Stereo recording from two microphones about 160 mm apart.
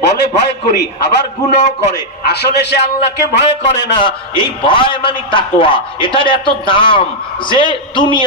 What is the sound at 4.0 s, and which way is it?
A man's voice, 30° left (ahead or behind).